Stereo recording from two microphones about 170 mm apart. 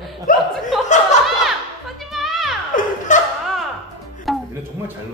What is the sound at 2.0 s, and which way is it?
Children playing, centre (ahead or behind).